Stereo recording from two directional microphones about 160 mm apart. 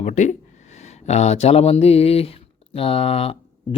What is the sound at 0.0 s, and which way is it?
Speech, 50° left (ahead or behind).